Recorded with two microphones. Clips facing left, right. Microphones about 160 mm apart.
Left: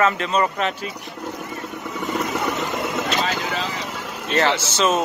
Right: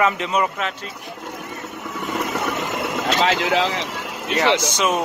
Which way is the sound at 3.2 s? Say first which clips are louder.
Right 6 dB; 75° right (ahead or behind).